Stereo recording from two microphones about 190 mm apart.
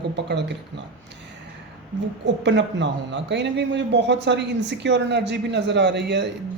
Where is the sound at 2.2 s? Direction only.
70° right (ahead or behind).